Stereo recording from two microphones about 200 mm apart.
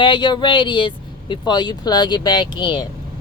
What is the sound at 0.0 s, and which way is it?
Speech, 25° left (ahead or behind).